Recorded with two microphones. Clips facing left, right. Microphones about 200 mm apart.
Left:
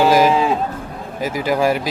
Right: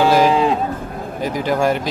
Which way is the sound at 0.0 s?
10° left (ahead or behind).